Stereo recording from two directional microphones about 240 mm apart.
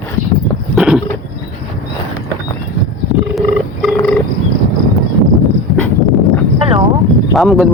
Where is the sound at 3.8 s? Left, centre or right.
Centre.